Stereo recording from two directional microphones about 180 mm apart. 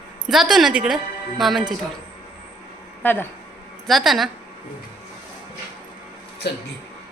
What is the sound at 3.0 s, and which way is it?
Speech, 10° left (ahead or behind).